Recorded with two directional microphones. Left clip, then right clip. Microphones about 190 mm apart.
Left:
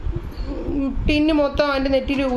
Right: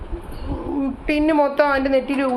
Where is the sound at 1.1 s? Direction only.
5° left (ahead or behind).